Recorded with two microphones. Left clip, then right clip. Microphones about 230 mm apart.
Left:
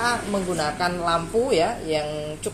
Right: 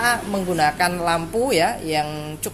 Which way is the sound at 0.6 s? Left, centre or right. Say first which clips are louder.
Right 8 dB; right.